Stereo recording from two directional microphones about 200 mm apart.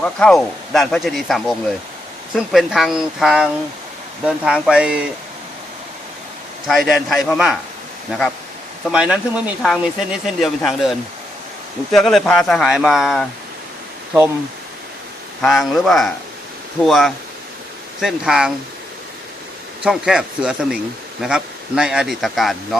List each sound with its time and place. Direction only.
0.0 s speech: 5° left (ahead or behind)
6.7 s speech: centre (ahead or behind)
8.8 s speech: 5° right (ahead or behind)
15.4 s speech: centre (ahead or behind)
19.8 s speech: 5° right (ahead or behind)